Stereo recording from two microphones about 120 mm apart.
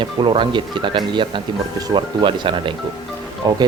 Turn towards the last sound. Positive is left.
turn(degrees=-35)  # may be behind; listen again after turning